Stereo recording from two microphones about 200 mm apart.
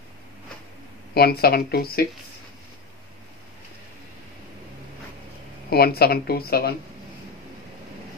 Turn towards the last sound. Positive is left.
turn(degrees=50)  # may be behind; listen again after turning